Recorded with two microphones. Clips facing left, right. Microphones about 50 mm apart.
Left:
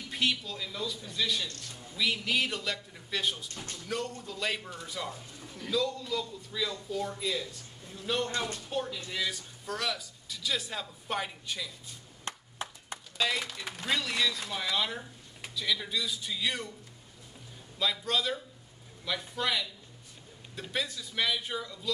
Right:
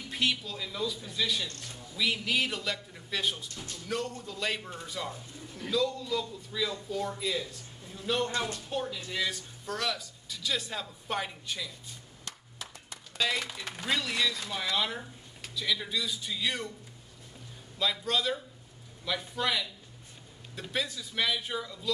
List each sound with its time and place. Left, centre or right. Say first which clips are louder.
0.1 s speech: even; centre
12.3 s a sound: left 6 dB; left
13.2 s speech: even; centre
17.7 s speech: even; centre